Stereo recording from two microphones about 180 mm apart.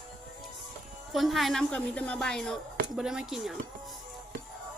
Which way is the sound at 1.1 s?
Centre (ahead or behind).